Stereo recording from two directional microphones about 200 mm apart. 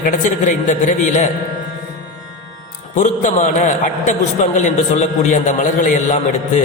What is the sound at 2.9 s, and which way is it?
A man's voice, 40° left (ahead or behind).